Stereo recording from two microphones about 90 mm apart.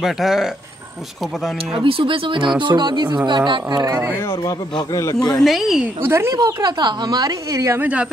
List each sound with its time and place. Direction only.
0.0 s speech: 5° right (ahead or behind)
1.7 s speech: 75° right (ahead or behind)
2.6 s a woman's voice: 55° right (ahead or behind)
3.8 s speech: 35° right (ahead or behind)
4.1 s speech: 35° left (ahead or behind)
5.4 s speech: centre (ahead or behind)
6.0 s speech: 30° right (ahead or behind)
6.3 s a woman's voice: 45° right (ahead or behind)
7.8 s speech: 15° right (ahead or behind)